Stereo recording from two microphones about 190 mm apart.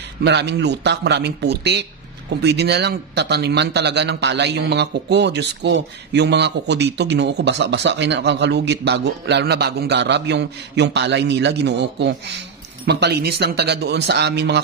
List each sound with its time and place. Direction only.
0.2 s speech: 65° right (ahead or behind)